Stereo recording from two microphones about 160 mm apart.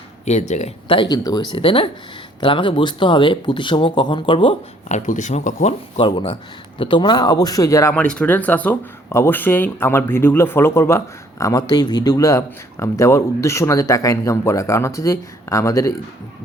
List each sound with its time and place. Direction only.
0.3 s speech: 45° left (ahead or behind); by 4.5 s 30° left (ahead or behind)
4.9 s speech: 50° left (ahead or behind)
6.0 s speech: 30° left (ahead or behind)